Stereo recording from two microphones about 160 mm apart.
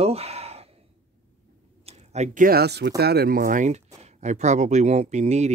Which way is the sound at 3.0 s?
80° right.